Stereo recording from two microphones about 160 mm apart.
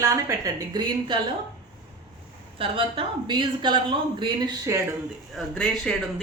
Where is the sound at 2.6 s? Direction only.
35° right (ahead or behind).